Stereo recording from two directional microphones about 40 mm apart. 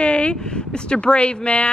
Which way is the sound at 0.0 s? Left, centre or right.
Left.